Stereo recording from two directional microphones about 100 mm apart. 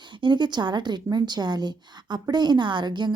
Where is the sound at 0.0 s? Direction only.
50° right (ahead or behind).